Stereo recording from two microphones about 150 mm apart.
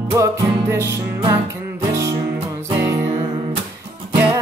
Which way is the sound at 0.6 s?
20° right (ahead or behind).